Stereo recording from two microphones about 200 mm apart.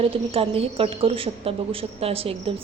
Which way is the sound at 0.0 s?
30° right (ahead or behind).